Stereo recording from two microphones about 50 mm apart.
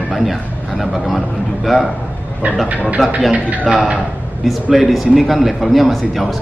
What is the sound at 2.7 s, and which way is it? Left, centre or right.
Speech, right.